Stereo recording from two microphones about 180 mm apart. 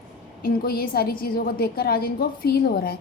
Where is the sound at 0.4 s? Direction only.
60° left (ahead or behind).